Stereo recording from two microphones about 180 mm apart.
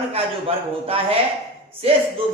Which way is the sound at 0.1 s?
35° right (ahead or behind).